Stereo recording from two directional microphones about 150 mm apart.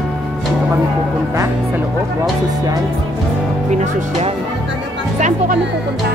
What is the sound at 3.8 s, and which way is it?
Speech, 45° right (ahead or behind).